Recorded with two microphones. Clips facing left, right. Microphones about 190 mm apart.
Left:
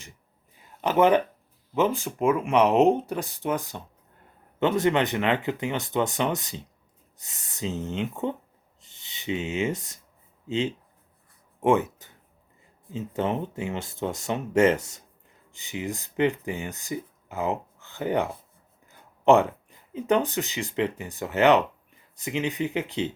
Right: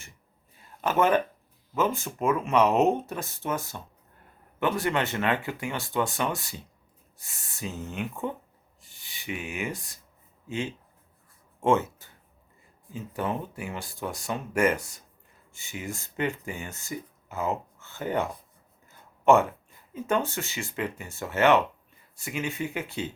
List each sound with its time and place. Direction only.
0.5 s a sound: 15° left (ahead or behind)
1.7 s speech: 15° left (ahead or behind)
8.8 s rub: 20° left (ahead or behind)
10.5 s speech: 20° left (ahead or behind)